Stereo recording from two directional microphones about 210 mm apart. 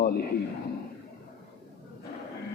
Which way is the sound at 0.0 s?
45° left (ahead or behind).